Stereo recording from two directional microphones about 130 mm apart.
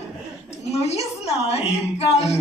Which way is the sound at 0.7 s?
55° left (ahead or behind).